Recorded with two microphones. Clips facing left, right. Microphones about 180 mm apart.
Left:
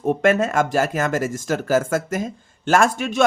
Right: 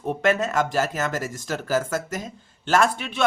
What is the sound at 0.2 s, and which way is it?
Speech, 50° left (ahead or behind).